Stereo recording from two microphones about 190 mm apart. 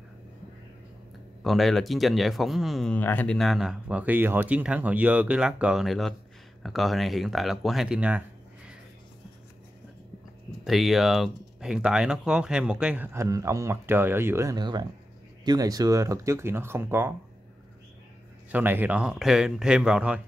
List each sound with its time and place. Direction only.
1.4 s speech: centre (ahead or behind)
10.6 s speech: centre (ahead or behind)
18.5 s speech: 10° right (ahead or behind)